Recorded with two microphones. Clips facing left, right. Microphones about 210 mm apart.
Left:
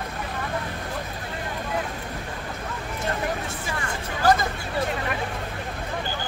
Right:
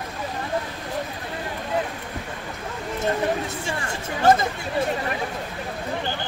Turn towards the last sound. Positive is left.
turn(degrees=-25)  # may be behind; listen again after turning